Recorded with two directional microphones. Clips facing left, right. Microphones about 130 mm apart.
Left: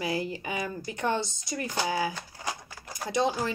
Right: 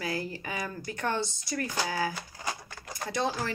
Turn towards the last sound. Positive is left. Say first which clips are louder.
# left 3 dB
turn(degrees=20)  # may be behind; listen again after turning